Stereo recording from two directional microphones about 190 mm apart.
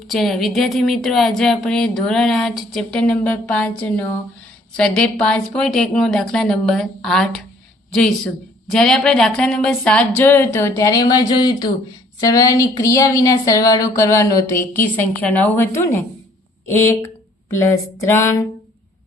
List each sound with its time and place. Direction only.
0.1 s a woman's voice: centre (ahead or behind)